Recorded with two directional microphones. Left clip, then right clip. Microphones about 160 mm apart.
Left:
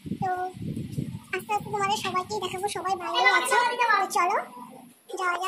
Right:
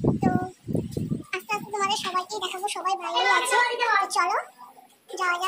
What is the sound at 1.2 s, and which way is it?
A child's voice, 15° left (ahead or behind).